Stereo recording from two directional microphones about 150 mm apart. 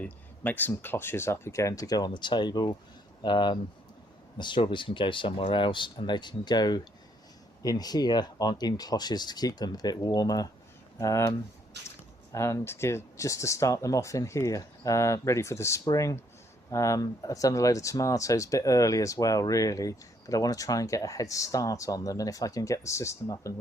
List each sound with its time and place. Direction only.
0.0 s speech: 10° left (ahead or behind)